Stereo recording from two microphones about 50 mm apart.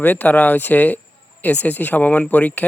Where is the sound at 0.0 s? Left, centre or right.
Left.